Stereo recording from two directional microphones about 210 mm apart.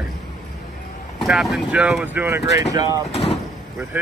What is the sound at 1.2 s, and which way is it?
Speech, centre (ahead or behind).